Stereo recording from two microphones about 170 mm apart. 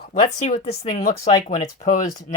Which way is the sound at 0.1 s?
50° left (ahead or behind).